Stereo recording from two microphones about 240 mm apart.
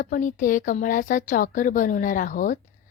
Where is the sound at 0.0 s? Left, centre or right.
Left.